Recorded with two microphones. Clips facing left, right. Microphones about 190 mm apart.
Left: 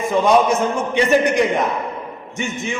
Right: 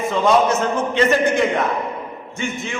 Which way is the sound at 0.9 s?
15° left (ahead or behind).